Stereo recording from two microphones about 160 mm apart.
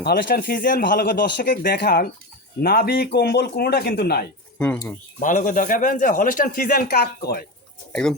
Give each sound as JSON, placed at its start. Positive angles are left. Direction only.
{"t": 0.0, "sound": "speech", "side_deg": 70}
{"t": 4.5, "sound": "speech", "side_deg": 5}
{"t": 5.2, "sound": "speech", "side_deg": 55}